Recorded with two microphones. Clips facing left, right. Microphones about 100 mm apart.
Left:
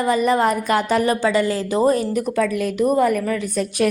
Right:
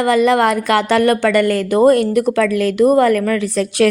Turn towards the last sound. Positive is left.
turn(degrees=-90)